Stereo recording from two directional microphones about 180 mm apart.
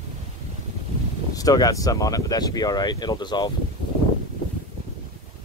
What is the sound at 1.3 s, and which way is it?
Speech, 20° left (ahead or behind).